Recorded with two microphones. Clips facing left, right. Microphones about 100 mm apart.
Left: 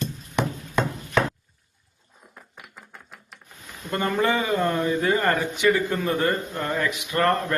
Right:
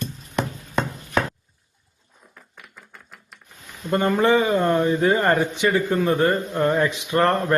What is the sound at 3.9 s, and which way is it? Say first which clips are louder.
Speech: right 5 dB; 25° right (ahead or behind).